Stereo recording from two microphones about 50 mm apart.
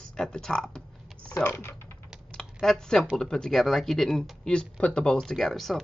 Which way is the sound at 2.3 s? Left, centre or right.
Centre.